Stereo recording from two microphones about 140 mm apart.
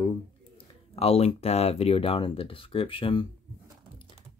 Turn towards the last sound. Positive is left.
turn(degrees=35)  # may be behind; listen again after turning